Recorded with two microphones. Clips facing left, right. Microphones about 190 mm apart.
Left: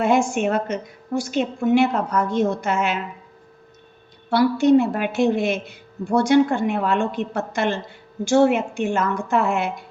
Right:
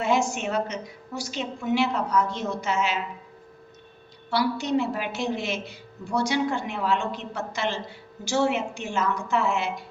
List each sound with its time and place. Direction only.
0.0 s a woman's voice: 55° left (ahead or behind)
4.3 s a woman's voice: 50° left (ahead or behind)